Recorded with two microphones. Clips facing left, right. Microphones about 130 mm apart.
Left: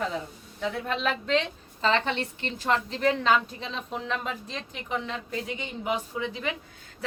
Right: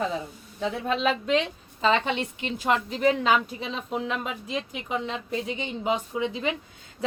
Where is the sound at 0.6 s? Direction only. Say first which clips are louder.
Right 3 dB; 20° right (ahead or behind).